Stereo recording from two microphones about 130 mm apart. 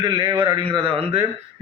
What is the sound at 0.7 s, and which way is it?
Speech, 40° right (ahead or behind).